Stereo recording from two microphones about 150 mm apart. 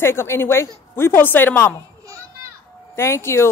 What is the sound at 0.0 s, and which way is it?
A woman's voice, 15° left (ahead or behind).